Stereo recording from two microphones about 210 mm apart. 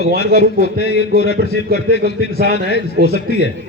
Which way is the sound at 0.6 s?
50° left (ahead or behind).